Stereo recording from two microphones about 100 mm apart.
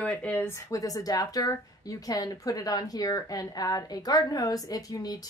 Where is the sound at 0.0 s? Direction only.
15° left (ahead or behind).